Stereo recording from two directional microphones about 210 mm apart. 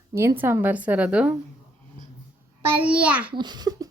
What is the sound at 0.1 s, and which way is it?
A woman's voice, 10° right (ahead or behind).